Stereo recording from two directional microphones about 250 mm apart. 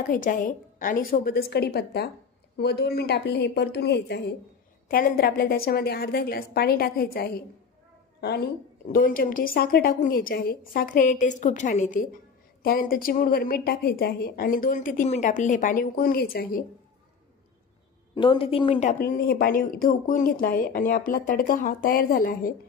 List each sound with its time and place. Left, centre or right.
0.1 s speech: left
8.8 s speech: left
18.1 s speech: centre